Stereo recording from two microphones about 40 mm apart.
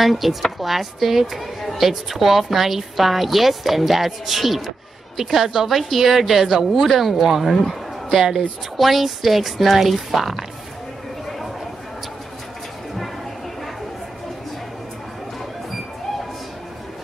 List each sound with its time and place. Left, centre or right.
0.0 s speech: centre